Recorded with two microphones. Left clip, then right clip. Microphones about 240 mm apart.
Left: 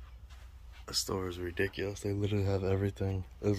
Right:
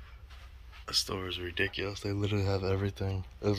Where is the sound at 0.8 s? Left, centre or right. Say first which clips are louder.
Right 2 dB; centre.